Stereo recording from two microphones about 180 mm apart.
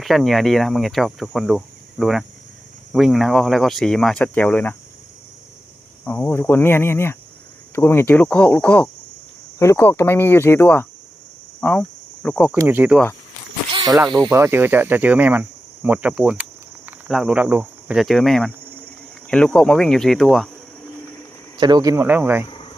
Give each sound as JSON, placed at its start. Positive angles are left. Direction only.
{"t": 0.0, "sound": "cricket", "side_deg": 0}
{"t": 6.1, "sound": "speech", "side_deg": 10}
{"t": 11.6, "sound": "cricket", "side_deg": 10}
{"t": 12.5, "sound": "speech", "side_deg": -10}
{"t": 13.7, "sound": "snake", "side_deg": -25}
{"t": 14.1, "sound": "speech", "side_deg": -25}
{"t": 14.3, "sound": "speech", "side_deg": -15}
{"t": 19.3, "sound": "cricket", "side_deg": 5}
{"t": 21.6, "sound": "speech", "side_deg": -20}
{"t": 22.4, "sound": "cricket", "side_deg": 25}